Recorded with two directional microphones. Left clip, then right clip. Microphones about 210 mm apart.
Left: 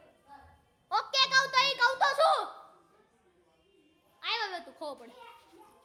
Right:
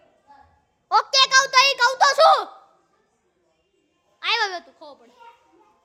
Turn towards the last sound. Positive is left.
turn(degrees=10)  # may be behind; listen again after turning